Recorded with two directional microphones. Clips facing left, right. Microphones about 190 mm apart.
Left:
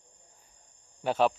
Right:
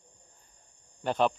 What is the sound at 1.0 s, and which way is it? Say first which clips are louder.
Speech: left 1 dB; 5° left (ahead or behind).